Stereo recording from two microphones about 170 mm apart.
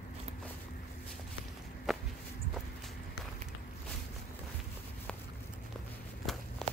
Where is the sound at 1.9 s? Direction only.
Centre (ahead or behind).